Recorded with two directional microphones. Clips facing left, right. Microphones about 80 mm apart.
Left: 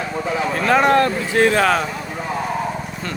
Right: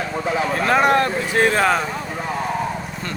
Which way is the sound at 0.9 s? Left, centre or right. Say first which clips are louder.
Left 2 dB; centre.